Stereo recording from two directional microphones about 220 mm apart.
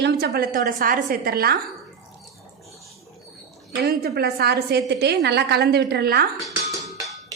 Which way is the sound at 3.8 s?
45° right (ahead or behind).